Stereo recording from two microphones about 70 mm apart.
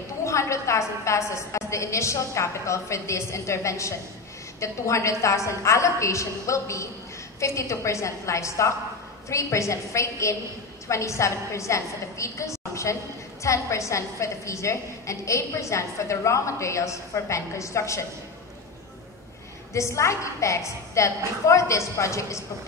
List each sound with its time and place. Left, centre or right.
0.2 s a woman's voice: left
19.7 s a woman's voice: left